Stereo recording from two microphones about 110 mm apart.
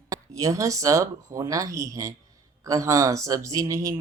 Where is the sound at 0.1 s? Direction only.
30° right (ahead or behind).